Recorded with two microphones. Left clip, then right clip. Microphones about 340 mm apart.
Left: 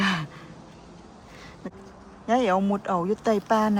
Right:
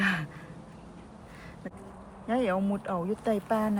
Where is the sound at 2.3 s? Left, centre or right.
Centre.